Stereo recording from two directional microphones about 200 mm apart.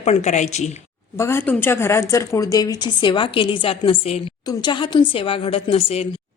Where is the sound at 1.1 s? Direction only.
15° left (ahead or behind).